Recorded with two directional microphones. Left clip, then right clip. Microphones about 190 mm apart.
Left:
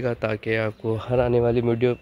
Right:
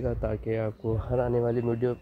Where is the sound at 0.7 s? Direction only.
25° left (ahead or behind).